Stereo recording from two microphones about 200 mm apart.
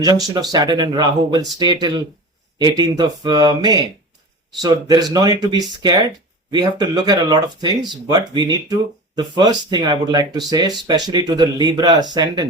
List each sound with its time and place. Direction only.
0.3 s speech: 20° right (ahead or behind)